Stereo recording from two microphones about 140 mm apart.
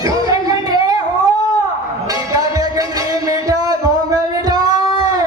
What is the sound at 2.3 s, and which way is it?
Music, 25° right (ahead or behind).